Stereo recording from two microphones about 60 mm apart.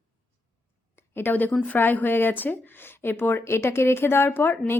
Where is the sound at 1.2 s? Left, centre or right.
Left.